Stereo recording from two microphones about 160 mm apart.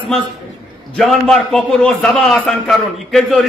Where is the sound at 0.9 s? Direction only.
Centre (ahead or behind).